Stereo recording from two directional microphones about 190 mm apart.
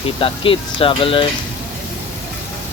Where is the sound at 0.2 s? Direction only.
30° left (ahead or behind).